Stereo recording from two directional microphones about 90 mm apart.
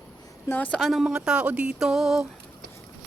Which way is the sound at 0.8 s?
Centre (ahead or behind).